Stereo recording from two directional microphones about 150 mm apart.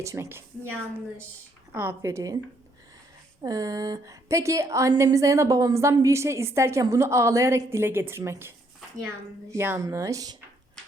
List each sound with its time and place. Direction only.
0.0 s a woman's voice: 20° right (ahead or behind)
3.4 s a woman's voice: 25° right (ahead or behind)